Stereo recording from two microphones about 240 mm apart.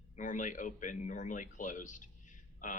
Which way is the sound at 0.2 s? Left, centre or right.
Left.